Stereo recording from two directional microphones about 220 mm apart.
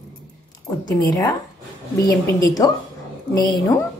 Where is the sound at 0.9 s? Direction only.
15° left (ahead or behind).